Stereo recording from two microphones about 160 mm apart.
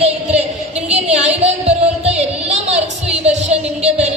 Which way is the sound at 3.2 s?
45° right (ahead or behind).